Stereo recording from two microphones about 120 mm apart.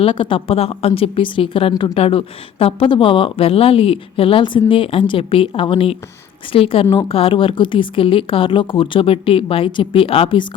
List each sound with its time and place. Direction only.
0.0 s a woman's voice: 45° left (ahead or behind)